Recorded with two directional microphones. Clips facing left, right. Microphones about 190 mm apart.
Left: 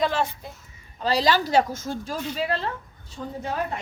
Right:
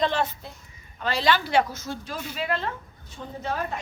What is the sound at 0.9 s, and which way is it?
A woman's voice, 35° left (ahead or behind).